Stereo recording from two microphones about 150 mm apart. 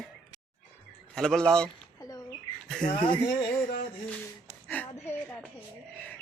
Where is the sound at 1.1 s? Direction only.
5° left (ahead or behind).